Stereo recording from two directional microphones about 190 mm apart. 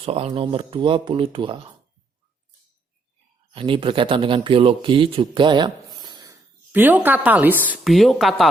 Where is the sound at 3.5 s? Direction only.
30° right (ahead or behind).